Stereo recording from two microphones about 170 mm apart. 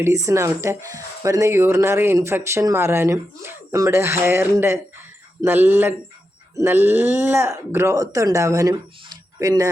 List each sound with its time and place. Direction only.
0.0 s speech: 20° right (ahead or behind)